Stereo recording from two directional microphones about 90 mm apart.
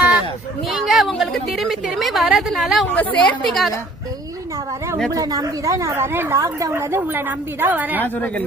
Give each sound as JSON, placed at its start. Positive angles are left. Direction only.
{"t": 0.7, "sound": "a woman's voice", "side_deg": 0}
{"t": 2.8, "sound": "a woman's voice", "side_deg": 15}
{"t": 3.4, "sound": "a woman's voice", "side_deg": 0}
{"t": 5.1, "sound": "a woman's voice", "side_deg": -40}
{"t": 6.1, "sound": "a woman's voice", "side_deg": -25}
{"t": 6.4, "sound": "a woman's voice", "side_deg": -35}
{"t": 8.0, "sound": "a woman's voice", "side_deg": 20}